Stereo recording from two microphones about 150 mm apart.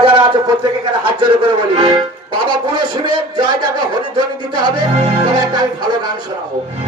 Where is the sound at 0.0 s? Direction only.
35° right (ahead or behind).